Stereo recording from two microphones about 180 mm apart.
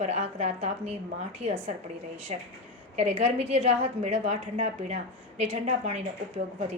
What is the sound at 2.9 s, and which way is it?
A woman's voice, 35° right (ahead or behind).